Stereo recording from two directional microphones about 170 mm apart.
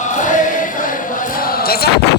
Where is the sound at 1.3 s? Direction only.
60° left (ahead or behind).